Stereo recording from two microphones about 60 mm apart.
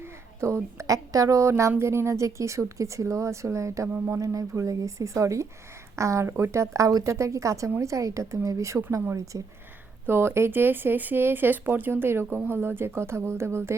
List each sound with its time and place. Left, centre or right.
0.0 s a woman's voice: right